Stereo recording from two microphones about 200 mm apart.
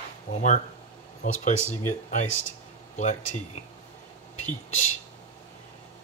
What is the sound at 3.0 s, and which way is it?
Speech, 35° left (ahead or behind).